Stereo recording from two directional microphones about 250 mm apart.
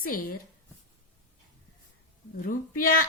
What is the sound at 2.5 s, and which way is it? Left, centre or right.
Speech, left.